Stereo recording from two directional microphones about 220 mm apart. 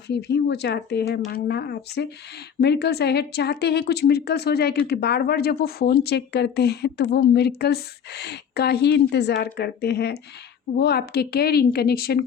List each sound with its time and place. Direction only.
0.1 s speech: 50° left (ahead or behind)